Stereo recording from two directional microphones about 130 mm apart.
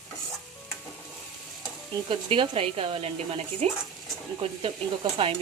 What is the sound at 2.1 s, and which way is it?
Speech, 40° right (ahead or behind).